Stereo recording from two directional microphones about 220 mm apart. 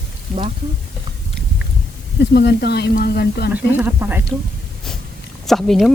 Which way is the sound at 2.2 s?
50° left (ahead or behind).